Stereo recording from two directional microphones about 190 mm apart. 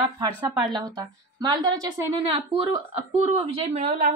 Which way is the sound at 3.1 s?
35° right (ahead or behind).